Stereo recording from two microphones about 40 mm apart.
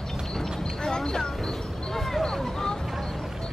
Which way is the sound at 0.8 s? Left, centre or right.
Centre.